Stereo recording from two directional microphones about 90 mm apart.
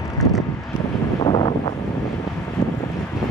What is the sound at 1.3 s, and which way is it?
Wind noise, 85° left.